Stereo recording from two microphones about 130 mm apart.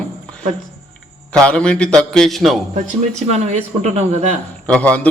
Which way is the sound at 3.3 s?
60° right (ahead or behind).